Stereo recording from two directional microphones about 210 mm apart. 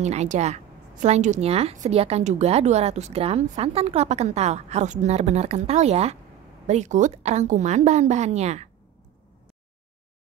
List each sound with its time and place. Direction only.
0.0 s a woman's voice: 35° right (ahead or behind)